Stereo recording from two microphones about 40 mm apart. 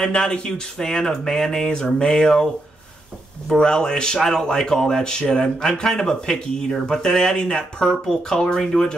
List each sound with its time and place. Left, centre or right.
0.0 s speech: centre
3.5 s speech: left